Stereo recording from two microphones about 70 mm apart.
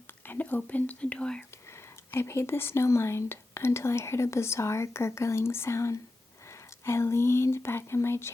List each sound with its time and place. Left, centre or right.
0.3 s speech: left
2.0 s speech: left